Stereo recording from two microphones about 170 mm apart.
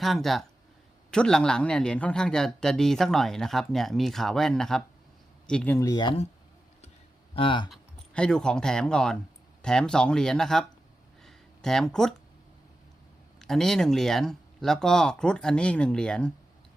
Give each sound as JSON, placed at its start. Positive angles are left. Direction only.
{"t": 0.0, "sound": "speech", "side_deg": 0}
{"t": 5.9, "sound": "speech", "side_deg": 25}
{"t": 7.3, "sound": "speech", "side_deg": 30}
{"t": 7.7, "sound": "speech", "side_deg": 5}
{"t": 11.2, "sound": "a sound", "side_deg": 0}
{"t": 13.4, "sound": "speech", "side_deg": 5}